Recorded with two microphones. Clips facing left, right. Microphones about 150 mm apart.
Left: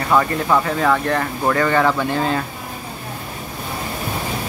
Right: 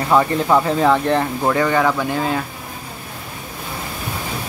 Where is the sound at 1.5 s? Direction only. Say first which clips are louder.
Left 1 dB; 10° right (ahead or behind).